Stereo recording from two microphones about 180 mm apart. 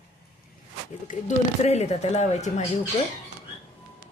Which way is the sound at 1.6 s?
35° left (ahead or behind).